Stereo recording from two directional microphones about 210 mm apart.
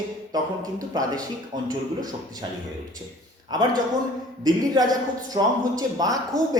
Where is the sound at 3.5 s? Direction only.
20° right (ahead or behind).